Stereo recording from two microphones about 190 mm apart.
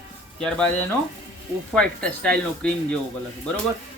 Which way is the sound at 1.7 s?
5° left (ahead or behind).